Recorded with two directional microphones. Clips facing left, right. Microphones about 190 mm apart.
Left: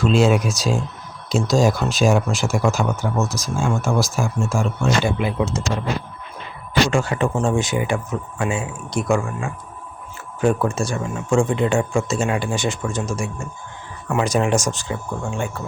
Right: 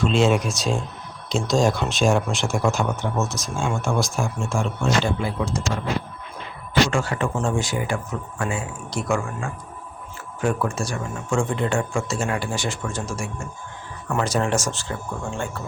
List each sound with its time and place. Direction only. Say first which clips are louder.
0.0 s speech: left 2 dB; centre (ahead or behind)
5.1 s speech: left 3 dB; 20° left (ahead or behind)
6.9 s speech: left 4 dB; 20° left (ahead or behind)